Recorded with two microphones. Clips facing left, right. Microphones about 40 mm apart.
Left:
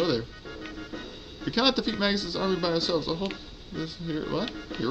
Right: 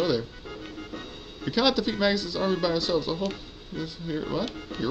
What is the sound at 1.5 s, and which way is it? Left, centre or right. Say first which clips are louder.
Speech: right 1 dB; centre.